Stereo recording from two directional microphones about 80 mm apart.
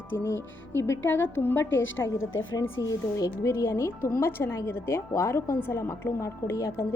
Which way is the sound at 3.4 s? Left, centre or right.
Left.